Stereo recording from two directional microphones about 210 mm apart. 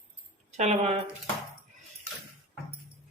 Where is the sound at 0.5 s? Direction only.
35° right (ahead or behind).